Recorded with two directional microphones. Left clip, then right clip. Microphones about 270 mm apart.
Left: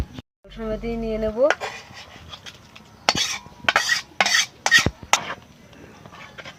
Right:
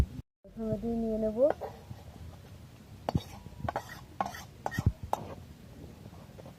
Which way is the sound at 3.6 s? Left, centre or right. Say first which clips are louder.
Left 18 dB; centre.